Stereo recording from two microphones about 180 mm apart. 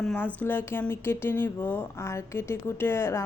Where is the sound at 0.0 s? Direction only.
5° left (ahead or behind).